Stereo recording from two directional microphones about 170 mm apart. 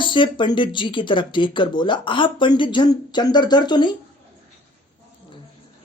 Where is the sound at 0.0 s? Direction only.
30° left (ahead or behind).